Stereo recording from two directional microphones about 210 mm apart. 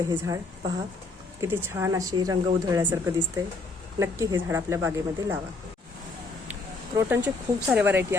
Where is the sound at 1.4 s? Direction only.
10° right (ahead or behind).